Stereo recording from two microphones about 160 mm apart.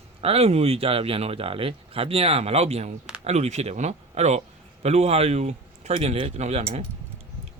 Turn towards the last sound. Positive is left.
turn(degrees=-40)  # may be behind; listen again after turning